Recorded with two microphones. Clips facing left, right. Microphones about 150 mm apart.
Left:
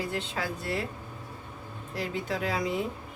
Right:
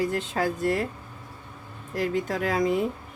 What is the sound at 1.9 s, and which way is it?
Speech, 45° right (ahead or behind).